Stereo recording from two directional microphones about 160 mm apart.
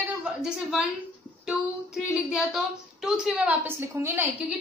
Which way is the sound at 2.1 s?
5° right (ahead or behind).